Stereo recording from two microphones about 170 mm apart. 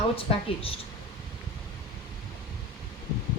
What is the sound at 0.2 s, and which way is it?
Speech, 35° left (ahead or behind).